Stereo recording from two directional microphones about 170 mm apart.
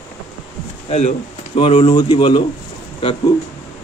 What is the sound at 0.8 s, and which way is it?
Speech, 40° left (ahead or behind).